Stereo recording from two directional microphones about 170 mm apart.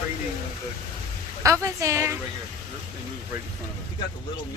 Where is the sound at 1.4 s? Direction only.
20° right (ahead or behind).